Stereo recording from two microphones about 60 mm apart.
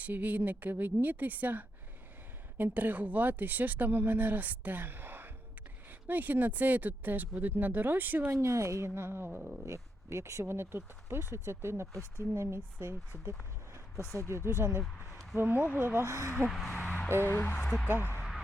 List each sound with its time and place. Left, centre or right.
0.0 s speech: right
8.4 s a woman's voice: right
9.6 s speech: right
10.4 s a woman's voice: right
13.7 s vehicle: right
14.2 s a woman's voice: right
14.8 s a sound: centre
15.4 s speech: right
16.0 s speech: right
16.5 s speech: centre
17.1 s speech: right
17.6 s speech: centre
17.8 s speech: right
18.2 s a sound: centre